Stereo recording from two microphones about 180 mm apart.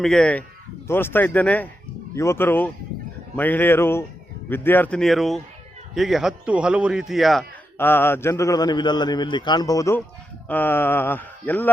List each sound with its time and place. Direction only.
0.0 s a man's voice: 5° left (ahead or behind)
7.8 s a man's voice: 10° left (ahead or behind)